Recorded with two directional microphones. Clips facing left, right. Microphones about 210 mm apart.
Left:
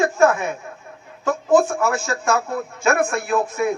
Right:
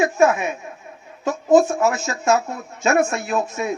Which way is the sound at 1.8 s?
20° right (ahead or behind).